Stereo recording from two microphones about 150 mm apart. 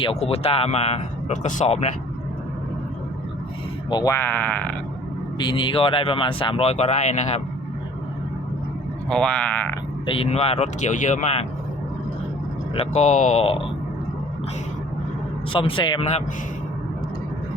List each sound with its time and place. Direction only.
0.0 s speech: 40° left (ahead or behind)
3.8 s speech: 30° left (ahead or behind)
4.1 s speech: 10° left (ahead or behind)
5.4 s speech: 30° left (ahead or behind); by 7.4 s 50° left (ahead or behind)
9.0 s speech: 5° left (ahead or behind)
10.1 s speech: 40° left (ahead or behind)
12.7 s speech: 45° left (ahead or behind)
15.5 s speech: 35° left (ahead or behind)